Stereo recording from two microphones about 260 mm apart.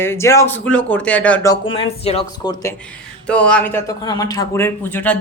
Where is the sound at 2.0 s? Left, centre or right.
Centre.